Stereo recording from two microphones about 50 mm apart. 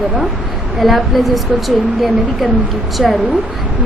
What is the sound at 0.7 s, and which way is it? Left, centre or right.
Speech, centre.